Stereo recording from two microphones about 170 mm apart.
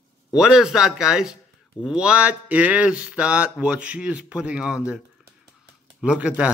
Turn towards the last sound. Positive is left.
turn(degrees=-5)  # may be behind; listen again after turning